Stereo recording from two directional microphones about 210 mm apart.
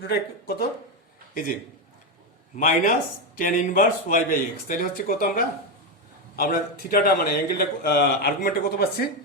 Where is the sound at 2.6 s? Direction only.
40° left (ahead or behind).